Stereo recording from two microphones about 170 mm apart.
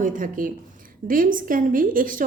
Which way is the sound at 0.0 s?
50° right (ahead or behind).